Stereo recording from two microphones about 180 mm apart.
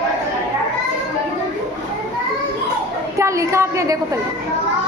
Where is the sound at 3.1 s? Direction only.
15° right (ahead or behind).